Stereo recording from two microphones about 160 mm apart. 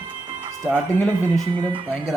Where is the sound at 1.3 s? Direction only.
30° right (ahead or behind).